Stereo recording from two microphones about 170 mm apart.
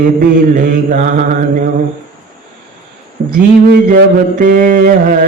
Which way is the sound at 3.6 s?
60° right (ahead or behind).